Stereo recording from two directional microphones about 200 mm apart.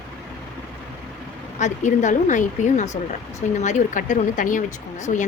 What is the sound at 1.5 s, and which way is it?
A woman's voice, 35° left (ahead or behind).